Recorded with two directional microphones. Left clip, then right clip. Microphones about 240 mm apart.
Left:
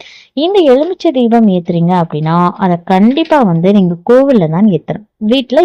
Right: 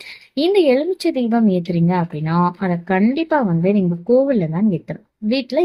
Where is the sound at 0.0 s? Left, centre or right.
Left.